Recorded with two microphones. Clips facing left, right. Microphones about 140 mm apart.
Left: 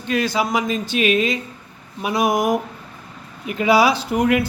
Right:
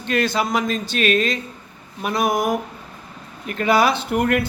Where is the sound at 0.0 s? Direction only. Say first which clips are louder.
Even; 5° left (ahead or behind).